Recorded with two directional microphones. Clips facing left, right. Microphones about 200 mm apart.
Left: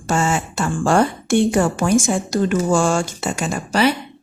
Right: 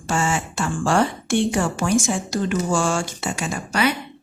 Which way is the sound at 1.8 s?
55° left (ahead or behind).